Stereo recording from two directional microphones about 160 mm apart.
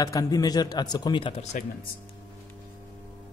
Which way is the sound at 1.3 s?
45° left (ahead or behind).